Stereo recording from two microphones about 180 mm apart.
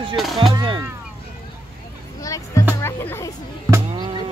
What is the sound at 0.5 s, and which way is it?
Speech, 25° right (ahead or behind).